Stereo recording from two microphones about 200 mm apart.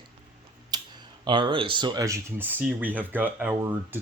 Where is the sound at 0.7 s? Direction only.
20° right (ahead or behind).